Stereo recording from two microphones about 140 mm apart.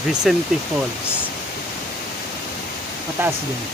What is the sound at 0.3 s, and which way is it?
Speech, centre (ahead or behind).